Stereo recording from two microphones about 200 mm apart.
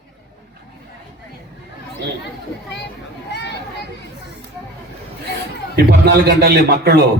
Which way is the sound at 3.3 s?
60° left (ahead or behind).